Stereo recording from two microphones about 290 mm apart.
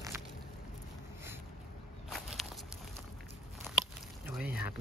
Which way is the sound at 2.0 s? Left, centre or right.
Centre.